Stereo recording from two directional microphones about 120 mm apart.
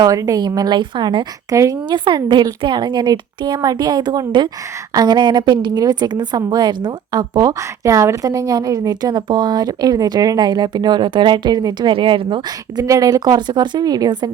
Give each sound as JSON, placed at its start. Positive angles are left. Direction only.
{"t": 0.0, "sound": "a woman's voice", "side_deg": -30}
{"t": 1.9, "sound": "a woman's voice", "side_deg": -40}
{"t": 12.8, "sound": "a woman's voice", "side_deg": -30}